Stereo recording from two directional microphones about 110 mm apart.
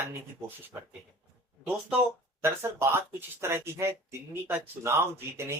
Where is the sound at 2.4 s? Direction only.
25° right (ahead or behind).